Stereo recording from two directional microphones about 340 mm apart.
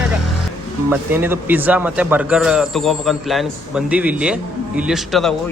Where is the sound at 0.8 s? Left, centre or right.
Centre.